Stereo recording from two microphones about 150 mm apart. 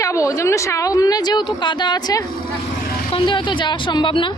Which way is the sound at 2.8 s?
75° left (ahead or behind).